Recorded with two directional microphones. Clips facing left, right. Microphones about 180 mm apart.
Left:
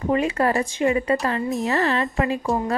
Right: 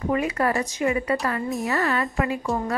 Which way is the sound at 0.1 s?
25° left (ahead or behind).